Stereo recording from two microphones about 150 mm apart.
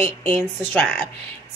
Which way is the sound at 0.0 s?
45° right (ahead or behind).